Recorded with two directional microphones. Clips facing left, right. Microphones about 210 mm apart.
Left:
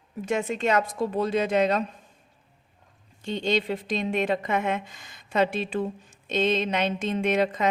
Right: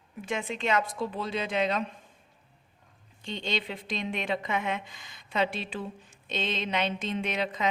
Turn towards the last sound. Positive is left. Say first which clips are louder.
# left 7 dB
turn(degrees=45)  # may be behind; listen again after turning